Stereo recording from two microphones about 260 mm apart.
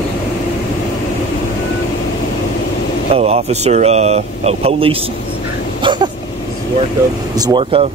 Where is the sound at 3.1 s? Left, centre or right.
Right.